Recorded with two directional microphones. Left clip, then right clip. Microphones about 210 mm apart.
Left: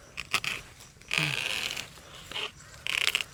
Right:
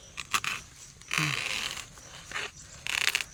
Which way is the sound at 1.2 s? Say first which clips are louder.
Left 1 dB; 5° right (ahead or behind).